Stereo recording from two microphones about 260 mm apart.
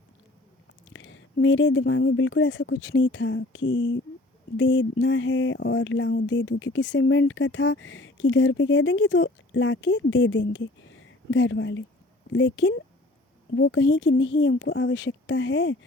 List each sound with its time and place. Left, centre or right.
0.9 s speech: left